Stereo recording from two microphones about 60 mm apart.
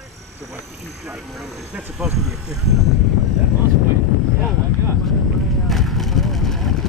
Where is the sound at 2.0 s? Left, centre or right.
Right.